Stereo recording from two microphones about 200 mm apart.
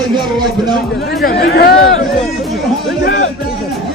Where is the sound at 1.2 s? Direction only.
55° left (ahead or behind).